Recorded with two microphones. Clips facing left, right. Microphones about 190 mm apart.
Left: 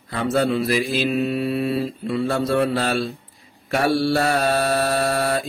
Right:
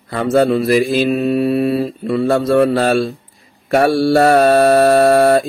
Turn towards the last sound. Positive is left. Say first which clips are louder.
# right 11 dB
turn(degrees=-55)  # may be behind; listen again after turning